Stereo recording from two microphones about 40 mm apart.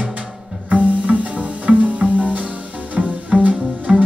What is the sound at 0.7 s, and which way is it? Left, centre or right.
Music, right.